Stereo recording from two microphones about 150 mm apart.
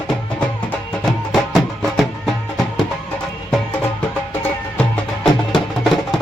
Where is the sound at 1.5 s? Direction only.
Centre (ahead or behind).